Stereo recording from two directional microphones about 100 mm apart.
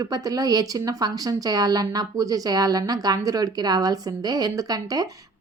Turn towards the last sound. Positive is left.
turn(degrees=-40)  # may be behind; listen again after turning